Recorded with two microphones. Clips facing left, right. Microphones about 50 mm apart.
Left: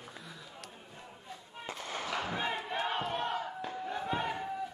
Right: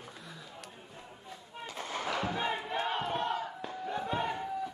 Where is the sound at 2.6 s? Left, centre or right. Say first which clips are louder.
Right 1 dB; centre.